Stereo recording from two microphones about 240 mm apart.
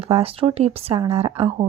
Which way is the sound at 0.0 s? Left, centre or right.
Right.